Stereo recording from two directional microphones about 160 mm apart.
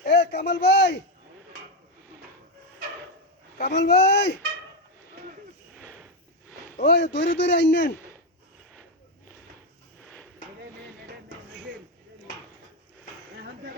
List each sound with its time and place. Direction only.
0.0 s speech: 90° left
3.6 s a man's voice: 90° left
6.7 s a man's voice: 90° left